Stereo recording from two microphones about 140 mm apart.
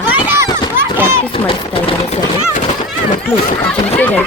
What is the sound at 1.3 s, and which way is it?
Speech, 40° left (ahead or behind).